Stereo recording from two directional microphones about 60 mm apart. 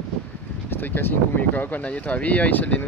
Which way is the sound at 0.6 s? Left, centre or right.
Left.